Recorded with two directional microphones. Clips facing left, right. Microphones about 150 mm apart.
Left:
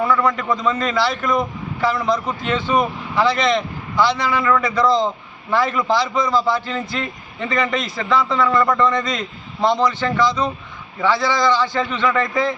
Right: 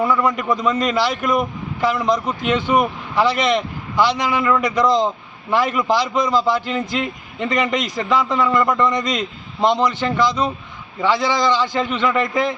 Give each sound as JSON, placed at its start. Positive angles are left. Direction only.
{"t": 0.0, "sound": "a man's voice", "side_deg": -10}